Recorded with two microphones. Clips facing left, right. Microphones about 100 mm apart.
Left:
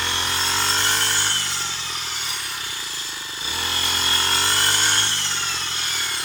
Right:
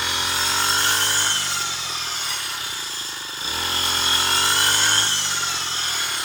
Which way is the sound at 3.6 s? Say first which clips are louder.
Right 1 dB; 25° right (ahead or behind).